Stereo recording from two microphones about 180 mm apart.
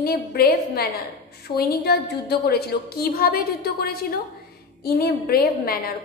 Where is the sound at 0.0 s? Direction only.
55° left (ahead or behind).